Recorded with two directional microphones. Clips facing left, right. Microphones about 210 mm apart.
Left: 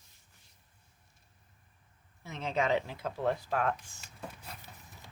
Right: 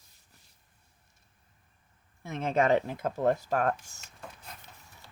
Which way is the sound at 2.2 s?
50° right (ahead or behind).